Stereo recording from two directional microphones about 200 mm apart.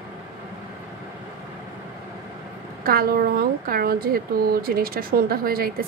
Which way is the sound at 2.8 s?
50° right (ahead or behind).